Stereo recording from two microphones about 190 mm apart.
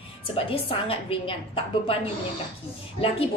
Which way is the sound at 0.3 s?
30° left (ahead or behind).